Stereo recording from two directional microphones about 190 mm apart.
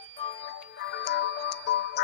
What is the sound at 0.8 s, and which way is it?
Music, 65° left (ahead or behind).